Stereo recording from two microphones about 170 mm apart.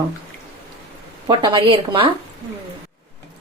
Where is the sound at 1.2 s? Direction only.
25° right (ahead or behind).